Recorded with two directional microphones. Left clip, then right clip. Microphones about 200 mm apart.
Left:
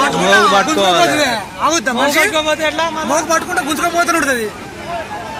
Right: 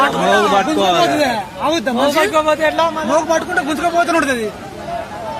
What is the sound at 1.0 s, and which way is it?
Speech, 45° right (ahead or behind).